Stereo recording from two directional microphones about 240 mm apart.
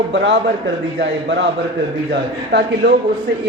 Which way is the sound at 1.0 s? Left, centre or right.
Right.